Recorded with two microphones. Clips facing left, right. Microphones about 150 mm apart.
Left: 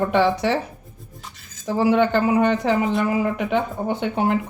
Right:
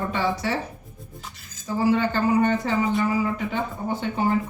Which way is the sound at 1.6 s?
70° left (ahead or behind).